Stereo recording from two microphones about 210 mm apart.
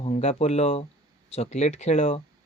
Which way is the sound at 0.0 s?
30° left (ahead or behind).